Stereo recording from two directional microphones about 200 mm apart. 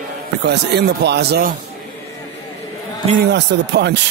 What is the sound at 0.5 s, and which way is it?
Speech, 55° right (ahead or behind).